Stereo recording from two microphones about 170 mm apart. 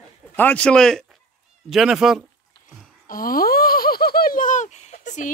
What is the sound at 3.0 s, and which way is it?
Laughter, 55° left (ahead or behind).